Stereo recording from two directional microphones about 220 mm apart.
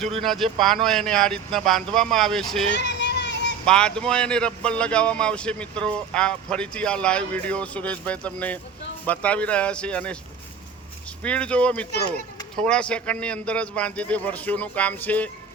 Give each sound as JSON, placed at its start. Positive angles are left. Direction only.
{"t": 0.2, "sound": "speech", "side_deg": 0}
{"t": 2.7, "sound": "a sound", "side_deg": 50}
{"t": 3.7, "sound": "speech", "side_deg": 5}
{"t": 11.2, "sound": "speech", "side_deg": 5}